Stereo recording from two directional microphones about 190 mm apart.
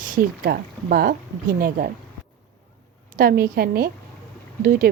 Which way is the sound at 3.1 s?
55° right (ahead or behind).